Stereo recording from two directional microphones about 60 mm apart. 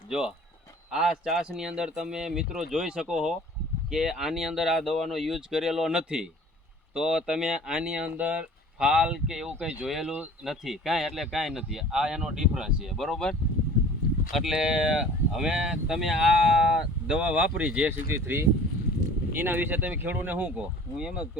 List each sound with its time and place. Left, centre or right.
0.1 s speech: centre
8.8 s speech: centre
12.9 s speech: centre
14.3 s speech: centre
18.1 s speech: right
19.4 s speech: right
20.9 s speech: centre